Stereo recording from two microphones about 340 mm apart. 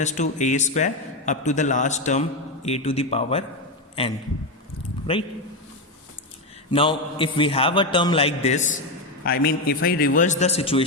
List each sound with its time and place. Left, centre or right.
0.0 s a man's voice: left
6.7 s a man's voice: centre